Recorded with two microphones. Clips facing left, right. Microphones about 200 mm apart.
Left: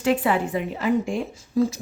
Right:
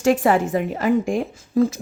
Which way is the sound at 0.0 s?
45° right (ahead or behind).